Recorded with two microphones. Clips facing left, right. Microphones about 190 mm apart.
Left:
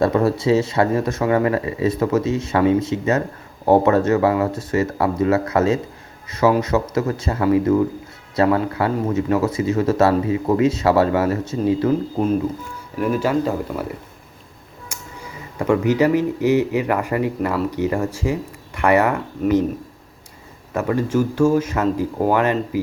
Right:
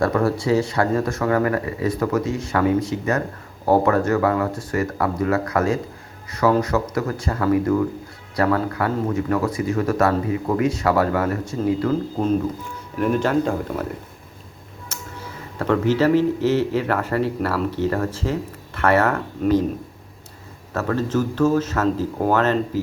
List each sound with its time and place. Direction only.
0.0 s speech: 20° left (ahead or behind)
13.0 s speech: 5° left (ahead or behind)
14.8 s speech: 10° left (ahead or behind)
20.7 s speech: 10° left (ahead or behind)